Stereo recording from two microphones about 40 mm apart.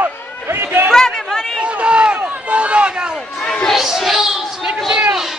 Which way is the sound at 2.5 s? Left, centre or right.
Right.